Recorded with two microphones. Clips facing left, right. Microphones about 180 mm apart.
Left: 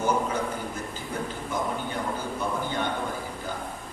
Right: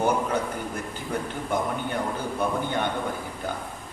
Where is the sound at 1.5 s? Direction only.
60° right (ahead or behind).